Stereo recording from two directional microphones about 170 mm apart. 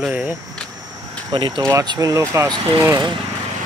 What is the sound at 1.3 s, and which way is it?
Speech, 30° right (ahead or behind).